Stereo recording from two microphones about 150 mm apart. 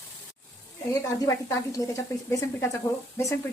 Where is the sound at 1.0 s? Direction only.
20° left (ahead or behind).